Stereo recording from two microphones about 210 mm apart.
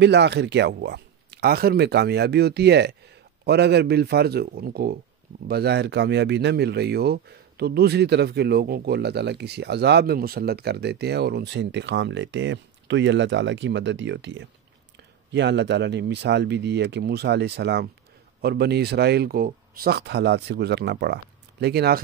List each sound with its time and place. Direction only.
0.0 s speech: 55° right (ahead or behind)